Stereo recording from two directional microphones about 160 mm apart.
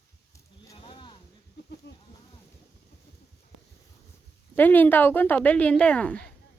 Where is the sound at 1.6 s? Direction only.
90° left.